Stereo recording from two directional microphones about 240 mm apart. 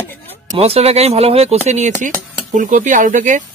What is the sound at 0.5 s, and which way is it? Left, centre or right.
Speech, right.